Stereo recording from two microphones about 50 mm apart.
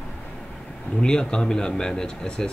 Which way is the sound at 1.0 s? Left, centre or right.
Centre.